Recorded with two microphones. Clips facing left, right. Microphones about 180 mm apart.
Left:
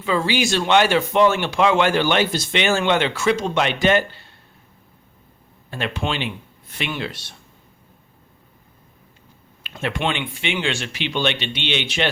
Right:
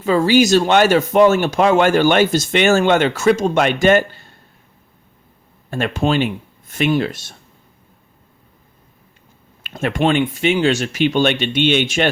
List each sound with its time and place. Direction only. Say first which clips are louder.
0.0 s speech: right 7 dB; 45° right (ahead or behind)
5.7 s speech: right 8 dB; 45° right (ahead or behind)
9.6 s speech: right 7 dB; 45° right (ahead or behind)